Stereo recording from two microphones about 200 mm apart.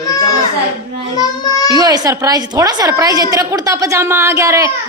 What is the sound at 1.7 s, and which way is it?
A woman's voice, 20° right (ahead or behind).